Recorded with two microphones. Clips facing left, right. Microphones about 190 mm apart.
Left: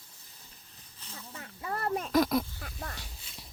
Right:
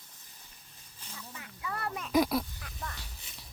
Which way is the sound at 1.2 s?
40° left (ahead or behind).